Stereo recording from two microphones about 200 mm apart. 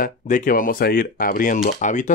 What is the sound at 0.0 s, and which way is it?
Speech, 45° left (ahead or behind).